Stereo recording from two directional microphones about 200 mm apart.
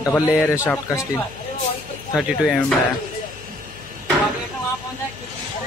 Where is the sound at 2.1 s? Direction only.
Centre (ahead or behind).